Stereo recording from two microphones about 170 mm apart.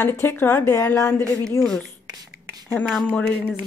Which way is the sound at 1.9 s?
25° right (ahead or behind).